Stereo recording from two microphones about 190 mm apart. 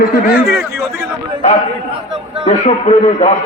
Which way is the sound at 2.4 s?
40° left (ahead or behind).